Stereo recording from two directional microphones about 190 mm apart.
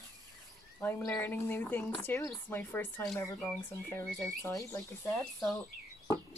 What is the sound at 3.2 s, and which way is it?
Speech, 15° left (ahead or behind).